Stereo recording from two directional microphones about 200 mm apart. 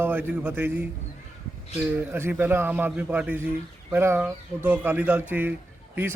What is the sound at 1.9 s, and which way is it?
Speech, 10° right (ahead or behind).